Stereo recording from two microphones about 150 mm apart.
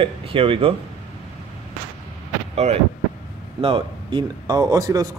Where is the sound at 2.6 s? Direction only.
45° right (ahead or behind).